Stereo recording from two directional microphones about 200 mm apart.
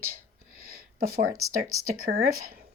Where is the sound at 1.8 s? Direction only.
45° right (ahead or behind).